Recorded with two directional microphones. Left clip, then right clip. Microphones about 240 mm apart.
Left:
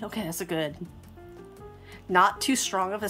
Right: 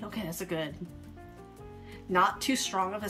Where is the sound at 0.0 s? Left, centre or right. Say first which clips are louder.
Left 4 dB; left.